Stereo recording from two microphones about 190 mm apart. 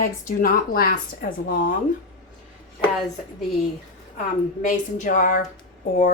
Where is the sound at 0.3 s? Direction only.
45° left (ahead or behind).